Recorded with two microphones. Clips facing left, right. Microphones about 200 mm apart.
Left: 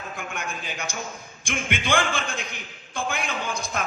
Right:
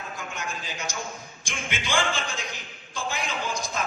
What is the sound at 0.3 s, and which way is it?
A man's voice, 55° left (ahead or behind).